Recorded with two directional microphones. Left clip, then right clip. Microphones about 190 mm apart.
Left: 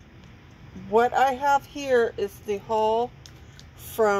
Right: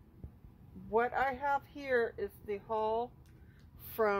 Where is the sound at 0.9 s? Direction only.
15° left (ahead or behind).